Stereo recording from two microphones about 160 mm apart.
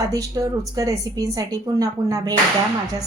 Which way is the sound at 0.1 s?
20° right (ahead or behind).